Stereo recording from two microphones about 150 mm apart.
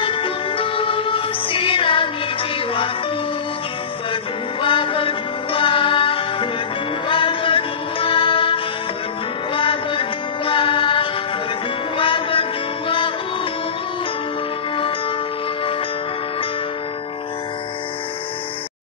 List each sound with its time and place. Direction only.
0.0 s music: 35° left (ahead or behind)
4.1 s music: 35° left (ahead or behind)